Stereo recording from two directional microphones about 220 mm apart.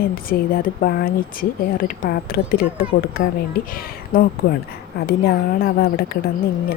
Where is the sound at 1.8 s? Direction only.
40° left (ahead or behind).